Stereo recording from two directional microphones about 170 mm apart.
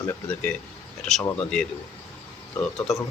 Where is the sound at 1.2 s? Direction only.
5° left (ahead or behind).